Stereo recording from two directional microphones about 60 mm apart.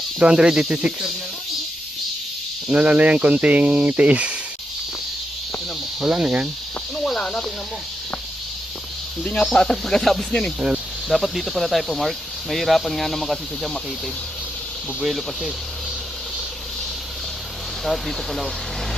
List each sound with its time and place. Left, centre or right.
0.2 s speech: centre
2.6 s speech: right
6.0 s speech: centre
6.9 s speech: centre
7.2 s speech: centre
9.4 s speech: centre
15.0 s speech: centre
17.8 s speech: centre